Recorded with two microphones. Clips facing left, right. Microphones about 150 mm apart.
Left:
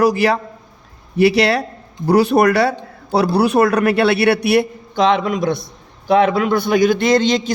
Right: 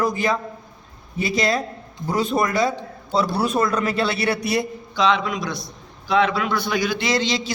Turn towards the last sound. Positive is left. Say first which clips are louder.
# left 8 dB
turn(degrees=50)  # may be behind; listen again after turning